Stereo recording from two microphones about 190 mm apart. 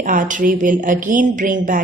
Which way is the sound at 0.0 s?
45° right (ahead or behind).